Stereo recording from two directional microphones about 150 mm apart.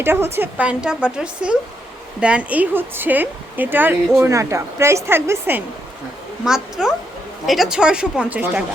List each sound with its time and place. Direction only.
0.0 s a woman's voice: 15° right (ahead or behind)
6.4 s speech: 5° right (ahead or behind)